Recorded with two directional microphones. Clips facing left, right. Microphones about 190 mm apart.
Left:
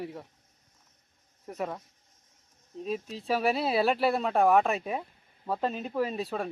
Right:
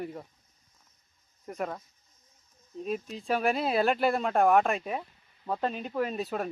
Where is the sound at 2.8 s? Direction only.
Centre (ahead or behind).